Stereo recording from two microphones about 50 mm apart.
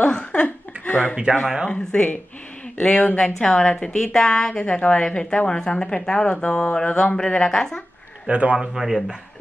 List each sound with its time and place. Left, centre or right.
0.0 s a sound: left
1.7 s speech: centre
2.9 s a woman's voice: left
3.3 s a woman's voice: centre
8.3 s a man's voice: right
8.5 s speech: centre